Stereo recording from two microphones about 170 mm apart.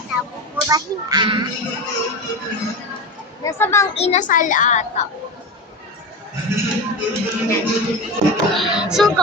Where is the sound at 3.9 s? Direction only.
40° left (ahead or behind).